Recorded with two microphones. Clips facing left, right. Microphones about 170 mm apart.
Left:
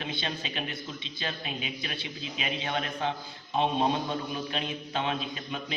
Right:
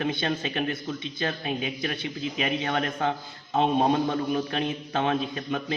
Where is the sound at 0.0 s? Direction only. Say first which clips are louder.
Right 8 dB; 50° right (ahead or behind).